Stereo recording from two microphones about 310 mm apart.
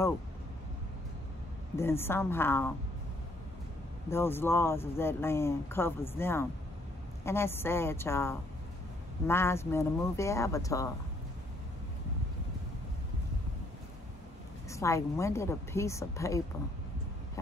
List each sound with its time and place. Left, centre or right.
1.8 s speech: centre
4.1 s speech: centre
14.7 s speech: centre